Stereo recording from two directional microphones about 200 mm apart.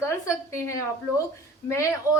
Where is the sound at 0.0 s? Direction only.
15° left (ahead or behind).